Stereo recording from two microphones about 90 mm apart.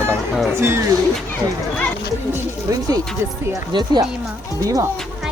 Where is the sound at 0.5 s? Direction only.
30° right (ahead or behind).